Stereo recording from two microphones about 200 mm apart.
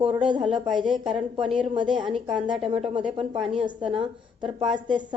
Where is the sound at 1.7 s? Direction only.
25° right (ahead or behind).